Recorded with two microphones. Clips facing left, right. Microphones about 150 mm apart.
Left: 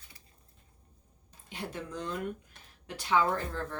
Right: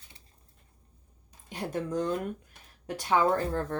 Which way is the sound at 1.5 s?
45° right (ahead or behind).